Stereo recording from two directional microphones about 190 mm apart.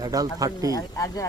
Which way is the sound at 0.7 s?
20° left (ahead or behind).